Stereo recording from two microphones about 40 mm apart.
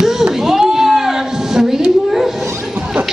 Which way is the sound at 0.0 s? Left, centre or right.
Centre.